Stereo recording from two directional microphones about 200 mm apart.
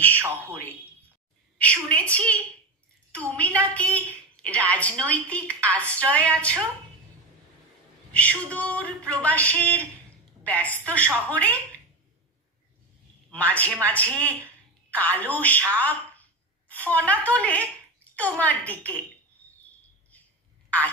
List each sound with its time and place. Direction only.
0.5 s a sound: 5° left (ahead or behind)
1.6 s a woman's voice: 5° left (ahead or behind)
8.1 s a woman's voice: 5° left (ahead or behind)
13.3 s a woman's voice: 5° left (ahead or behind)
16.6 s a woman's voice: 10° left (ahead or behind)